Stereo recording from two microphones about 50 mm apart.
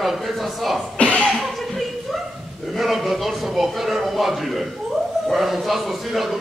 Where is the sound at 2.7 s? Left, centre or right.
Centre.